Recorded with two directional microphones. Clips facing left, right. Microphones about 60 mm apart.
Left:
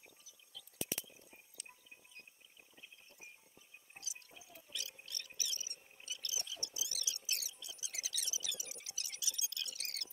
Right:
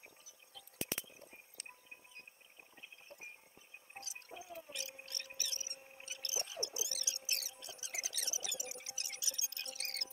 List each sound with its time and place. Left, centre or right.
0.5 s squish: right
1.6 s music: right
3.9 s music: right
5.0 s a sound: right